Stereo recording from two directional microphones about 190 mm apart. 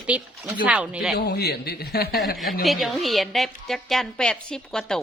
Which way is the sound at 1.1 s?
55° left (ahead or behind).